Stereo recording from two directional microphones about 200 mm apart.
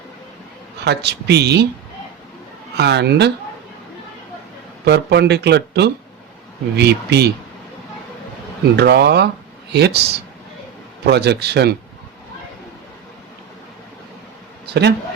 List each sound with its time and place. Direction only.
0.9 s speech: 55° right (ahead or behind)
2.7 s speech: 55° right (ahead or behind)
4.9 s speech: 55° right (ahead or behind)
8.7 s speech: 55° right (ahead or behind)
14.7 s a man's voice: 60° right (ahead or behind)